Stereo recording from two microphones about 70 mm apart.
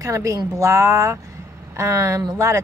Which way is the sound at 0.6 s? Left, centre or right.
Right.